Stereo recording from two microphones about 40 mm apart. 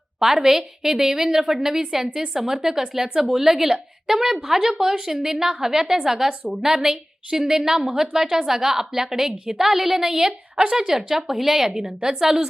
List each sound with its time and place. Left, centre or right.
0.2 s speech: centre